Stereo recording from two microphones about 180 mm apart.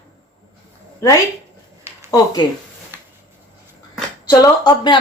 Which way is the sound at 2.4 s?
25° left (ahead or behind).